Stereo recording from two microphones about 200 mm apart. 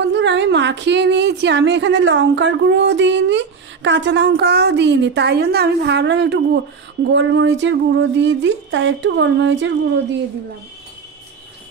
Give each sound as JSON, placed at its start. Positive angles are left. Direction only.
{"t": 0.0, "sound": "a woman's voice", "side_deg": -60}